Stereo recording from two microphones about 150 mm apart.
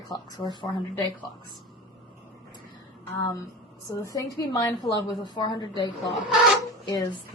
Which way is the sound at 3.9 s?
20° left (ahead or behind).